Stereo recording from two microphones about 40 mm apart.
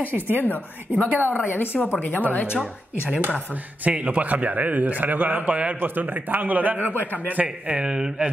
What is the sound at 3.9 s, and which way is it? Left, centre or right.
A man's voice, right.